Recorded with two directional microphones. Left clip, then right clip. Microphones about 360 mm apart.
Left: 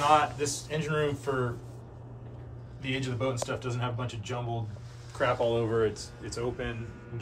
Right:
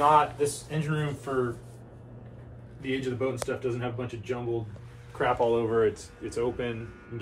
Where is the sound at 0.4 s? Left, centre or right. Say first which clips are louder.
Right 2 dB; centre.